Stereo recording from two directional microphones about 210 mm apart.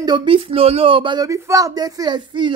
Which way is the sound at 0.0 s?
20° right (ahead or behind).